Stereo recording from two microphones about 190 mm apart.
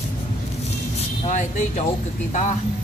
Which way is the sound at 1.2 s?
40° left (ahead or behind).